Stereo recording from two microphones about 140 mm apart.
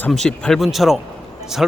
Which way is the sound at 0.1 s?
5° left (ahead or behind).